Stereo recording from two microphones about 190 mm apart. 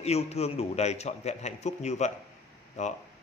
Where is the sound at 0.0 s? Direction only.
35° left (ahead or behind).